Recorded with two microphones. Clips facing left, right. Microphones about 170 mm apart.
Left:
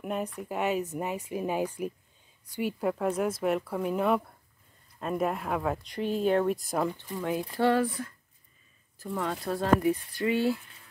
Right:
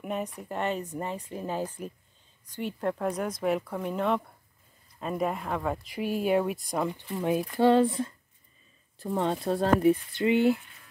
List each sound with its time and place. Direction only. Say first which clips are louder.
0.0 s speech: even; centre (ahead or behind)
6.9 s speech: right 3 dB; 20° right (ahead or behind)